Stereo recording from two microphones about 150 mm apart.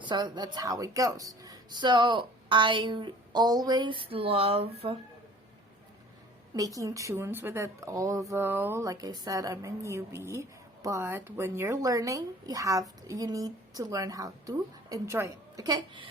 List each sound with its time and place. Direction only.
0.0 s speech: 30° right (ahead or behind)
6.5 s speech: 25° right (ahead or behind)